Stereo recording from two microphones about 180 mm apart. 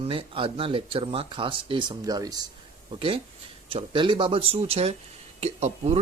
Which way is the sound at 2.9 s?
30° right (ahead or behind).